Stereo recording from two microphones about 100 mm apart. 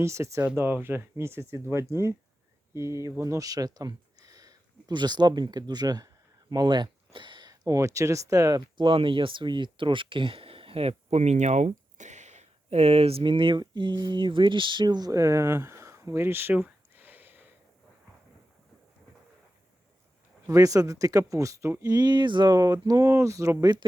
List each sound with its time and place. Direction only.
0.0 s speech: 30° right (ahead or behind)
6.5 s a sound: 45° right (ahead or behind)
7.5 s speech: 35° right (ahead or behind)
8.8 s speech: 60° right (ahead or behind); by 17.4 s 20° right (ahead or behind)
20.5 s speech: 35° right (ahead or behind)
21.9 s speech: 45° right (ahead or behind)